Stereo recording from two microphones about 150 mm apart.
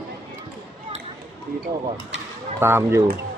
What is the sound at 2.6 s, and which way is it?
Speech, 15° right (ahead or behind).